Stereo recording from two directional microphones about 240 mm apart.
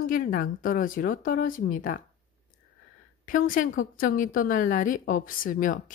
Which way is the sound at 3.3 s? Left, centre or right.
Left.